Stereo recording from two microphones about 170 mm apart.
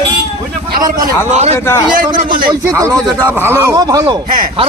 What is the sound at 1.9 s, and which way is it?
Speech, 55° right (ahead or behind).